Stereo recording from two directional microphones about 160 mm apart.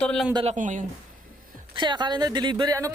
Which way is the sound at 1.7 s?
30° right (ahead or behind).